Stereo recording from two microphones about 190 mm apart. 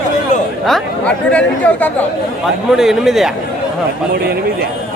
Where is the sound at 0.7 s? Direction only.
5° left (ahead or behind).